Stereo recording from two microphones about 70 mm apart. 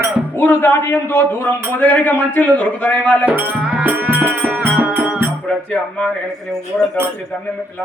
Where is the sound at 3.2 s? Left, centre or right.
Right.